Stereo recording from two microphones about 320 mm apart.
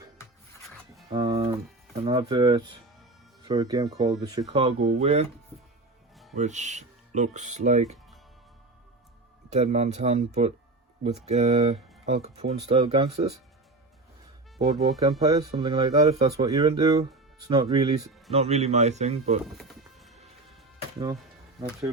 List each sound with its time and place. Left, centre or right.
1.1 s a sound: centre
2.0 s speech: centre
6.3 s speech: right
9.5 s speech: right
15.2 s speech: centre
19.5 s music: centre